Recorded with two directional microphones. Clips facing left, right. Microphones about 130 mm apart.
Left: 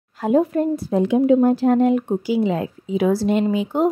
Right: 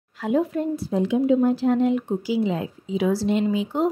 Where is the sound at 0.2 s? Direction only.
40° left (ahead or behind).